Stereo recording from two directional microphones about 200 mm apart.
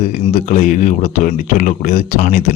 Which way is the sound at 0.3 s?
40° left (ahead or behind).